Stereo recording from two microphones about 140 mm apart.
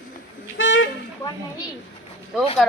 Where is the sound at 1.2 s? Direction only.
20° left (ahead or behind).